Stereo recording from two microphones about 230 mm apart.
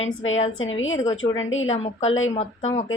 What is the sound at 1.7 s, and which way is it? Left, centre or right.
Speech, left.